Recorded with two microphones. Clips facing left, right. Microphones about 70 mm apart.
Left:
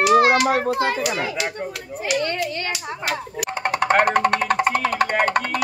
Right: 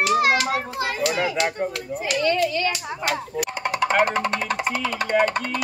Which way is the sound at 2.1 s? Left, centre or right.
Left.